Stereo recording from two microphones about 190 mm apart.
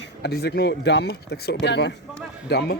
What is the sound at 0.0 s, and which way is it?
A man's voice, 60° left (ahead or behind).